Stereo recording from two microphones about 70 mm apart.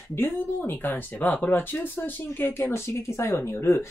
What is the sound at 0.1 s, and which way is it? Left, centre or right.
Speech, left.